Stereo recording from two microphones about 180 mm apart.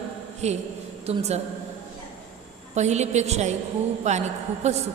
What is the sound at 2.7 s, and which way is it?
A woman's voice, 40° right (ahead or behind).